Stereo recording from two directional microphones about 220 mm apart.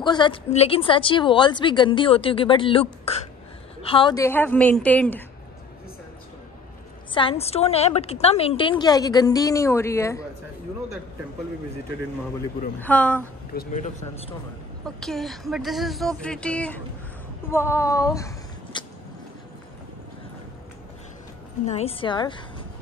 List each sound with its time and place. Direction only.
0.0 s a woman's voice: 20° left (ahead or behind)
7.2 s a woman's voice: 25° left (ahead or behind)
12.8 s a woman's voice: 5° left (ahead or behind)
13.5 s speech: 40° left (ahead or behind)
15.0 s speech: centre (ahead or behind); by 18.9 s 15° left (ahead or behind)
21.6 s a woman's voice: 25° left (ahead or behind)